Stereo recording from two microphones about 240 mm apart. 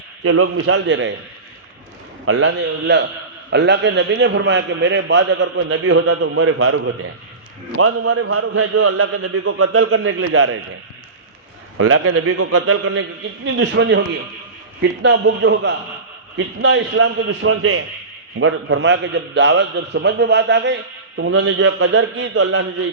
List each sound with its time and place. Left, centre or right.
0.2 s a man's voice: right
2.2 s a man's voice: right
11.8 s a man's voice: right